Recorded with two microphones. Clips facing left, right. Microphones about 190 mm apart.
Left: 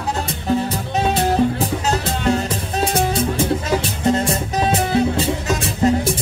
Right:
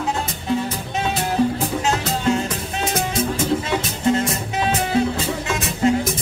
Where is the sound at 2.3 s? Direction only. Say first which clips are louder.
Left 1 dB; 35° left (ahead or behind).